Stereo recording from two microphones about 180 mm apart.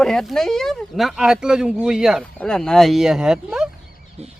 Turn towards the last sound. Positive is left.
turn(degrees=-35)  # may be behind; listen again after turning